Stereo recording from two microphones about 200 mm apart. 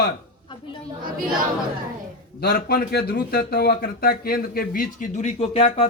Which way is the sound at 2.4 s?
50° left (ahead or behind).